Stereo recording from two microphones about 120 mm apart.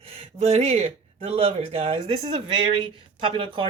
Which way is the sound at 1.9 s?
50° right (ahead or behind).